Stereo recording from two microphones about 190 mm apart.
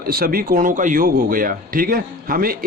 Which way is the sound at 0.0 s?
50° right (ahead or behind).